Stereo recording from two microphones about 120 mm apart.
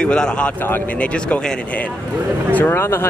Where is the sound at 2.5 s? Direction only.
20° left (ahead or behind).